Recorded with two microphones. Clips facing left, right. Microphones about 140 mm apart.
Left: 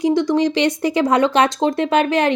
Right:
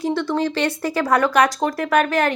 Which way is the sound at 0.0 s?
15° left (ahead or behind).